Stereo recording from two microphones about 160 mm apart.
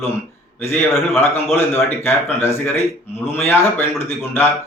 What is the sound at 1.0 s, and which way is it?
A man's voice, 15° left (ahead or behind).